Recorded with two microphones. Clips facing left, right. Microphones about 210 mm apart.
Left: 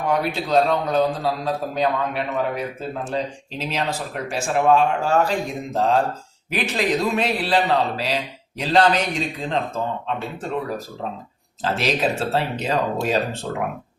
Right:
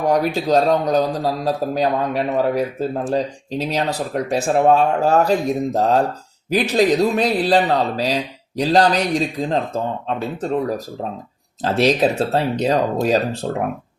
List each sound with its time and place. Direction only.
0.0 s speech: 40° right (ahead or behind)